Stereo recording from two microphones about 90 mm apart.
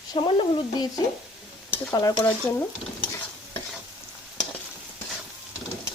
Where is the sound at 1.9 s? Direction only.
45° left (ahead or behind).